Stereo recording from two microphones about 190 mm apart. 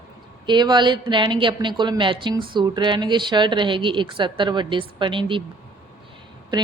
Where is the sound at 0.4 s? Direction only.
25° right (ahead or behind).